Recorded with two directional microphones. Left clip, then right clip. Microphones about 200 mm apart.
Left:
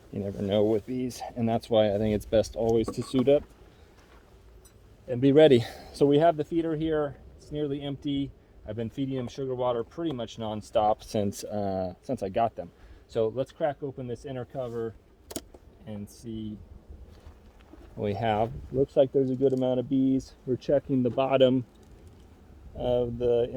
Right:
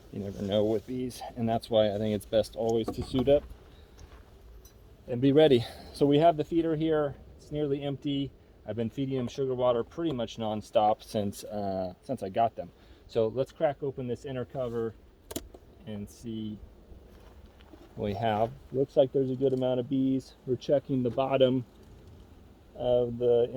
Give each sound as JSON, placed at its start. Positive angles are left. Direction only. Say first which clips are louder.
{"t": 0.1, "sound": "speech", "louder": "left 2 dB", "side_deg": 40}
{"t": 5.0, "sound": "speech", "louder": "left 3 dB", "side_deg": 35}
{"t": 6.1, "sound": "speech", "louder": "even", "side_deg": 25}
{"t": 10.9, "sound": "speech", "louder": "left 2 dB", "side_deg": 35}
{"t": 13.1, "sound": "speech", "louder": "even", "side_deg": 20}
{"t": 16.2, "sound": "speech", "louder": "even", "side_deg": 5}
{"t": 18.0, "sound": "speech", "louder": "left 1 dB", "side_deg": 35}
{"t": 19.4, "sound": "speech", "louder": "left 2 dB", "side_deg": 50}
{"t": 20.7, "sound": "speech", "louder": "left 2 dB", "side_deg": 35}
{"t": 22.8, "sound": "speech", "louder": "even", "side_deg": 35}